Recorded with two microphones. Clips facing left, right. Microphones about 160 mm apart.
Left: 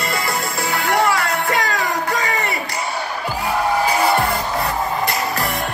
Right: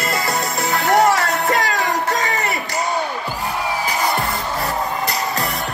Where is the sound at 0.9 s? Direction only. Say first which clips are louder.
Right 3 dB; 20° right (ahead or behind).